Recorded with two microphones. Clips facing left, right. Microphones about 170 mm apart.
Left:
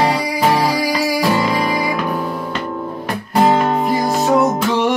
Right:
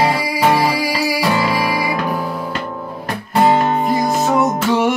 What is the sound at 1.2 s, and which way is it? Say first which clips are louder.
Music: left 1 dB; 5° right (ahead or behind).